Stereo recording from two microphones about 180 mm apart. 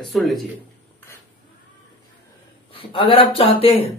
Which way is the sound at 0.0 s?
Centre (ahead or behind).